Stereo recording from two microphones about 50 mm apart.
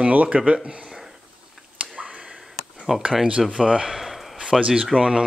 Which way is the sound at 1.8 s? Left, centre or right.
Right.